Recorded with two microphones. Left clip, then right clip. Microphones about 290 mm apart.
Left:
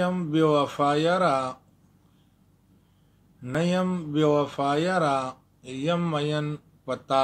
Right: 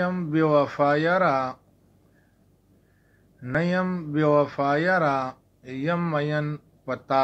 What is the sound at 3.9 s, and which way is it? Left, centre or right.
Speech, left.